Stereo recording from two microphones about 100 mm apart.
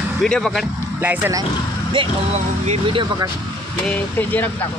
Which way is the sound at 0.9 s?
20° right (ahead or behind).